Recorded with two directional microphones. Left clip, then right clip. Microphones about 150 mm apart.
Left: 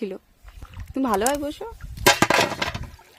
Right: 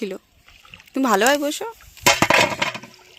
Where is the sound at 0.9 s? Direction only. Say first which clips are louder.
Right 5 dB; 15° right (ahead or behind).